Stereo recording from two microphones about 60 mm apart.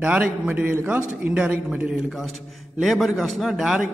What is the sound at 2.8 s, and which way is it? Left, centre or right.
A man's voice, centre.